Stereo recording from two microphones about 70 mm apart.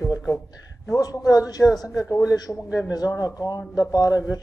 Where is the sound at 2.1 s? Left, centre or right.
Left.